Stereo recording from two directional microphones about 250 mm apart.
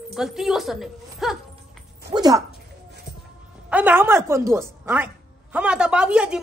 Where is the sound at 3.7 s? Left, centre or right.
Centre.